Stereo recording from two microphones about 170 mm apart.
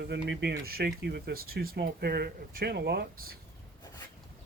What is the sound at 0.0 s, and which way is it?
Speech, 85° right.